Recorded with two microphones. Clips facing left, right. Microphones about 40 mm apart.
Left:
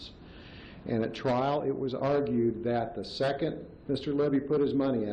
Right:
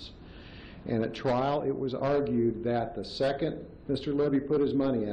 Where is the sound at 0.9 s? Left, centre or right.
Centre.